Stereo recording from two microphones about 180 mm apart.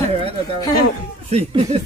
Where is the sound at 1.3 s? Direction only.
35° right (ahead or behind).